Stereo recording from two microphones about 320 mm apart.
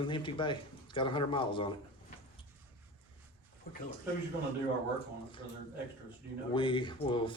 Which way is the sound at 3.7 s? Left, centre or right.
Left.